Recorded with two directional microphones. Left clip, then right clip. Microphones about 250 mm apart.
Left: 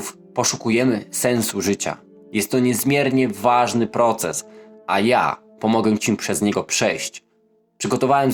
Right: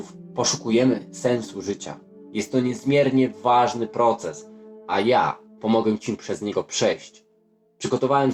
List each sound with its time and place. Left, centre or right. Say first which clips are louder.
0.1 s speech: left 2 dB; left